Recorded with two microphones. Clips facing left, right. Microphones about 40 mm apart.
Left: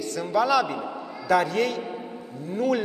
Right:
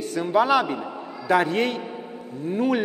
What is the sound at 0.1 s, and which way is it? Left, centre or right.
A man's voice, right.